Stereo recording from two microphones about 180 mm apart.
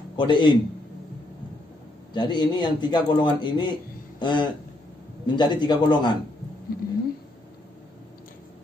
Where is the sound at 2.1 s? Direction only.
25° left (ahead or behind).